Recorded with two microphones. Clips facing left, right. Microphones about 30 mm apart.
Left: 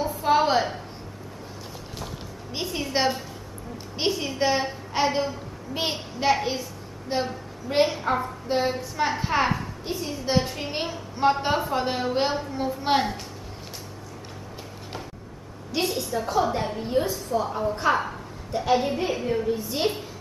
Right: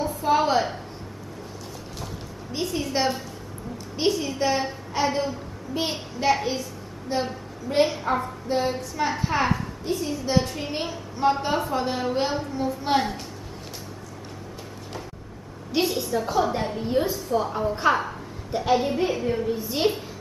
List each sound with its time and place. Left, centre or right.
0.0 s a sound: centre
2.5 s a child's voice: centre
15.7 s a woman's voice: centre